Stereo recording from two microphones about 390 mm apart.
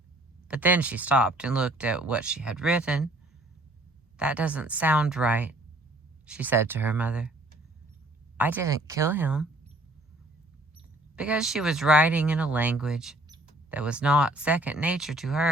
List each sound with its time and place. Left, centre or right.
0.4 s speech: centre
4.2 s speech: centre
8.4 s speech: centre
11.2 s speech: centre